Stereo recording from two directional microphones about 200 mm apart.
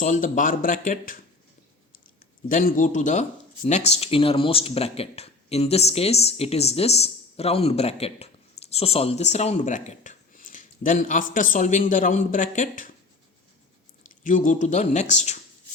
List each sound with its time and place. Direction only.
0.0 s speech: 40° left (ahead or behind)
2.5 s speech: 40° left (ahead or behind)
14.3 s speech: 40° left (ahead or behind)